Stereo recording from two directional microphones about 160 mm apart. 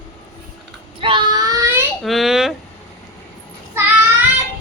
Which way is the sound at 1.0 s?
35° right (ahead or behind).